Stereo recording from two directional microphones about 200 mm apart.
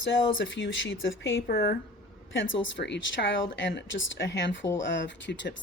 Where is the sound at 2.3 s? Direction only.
70° left (ahead or behind).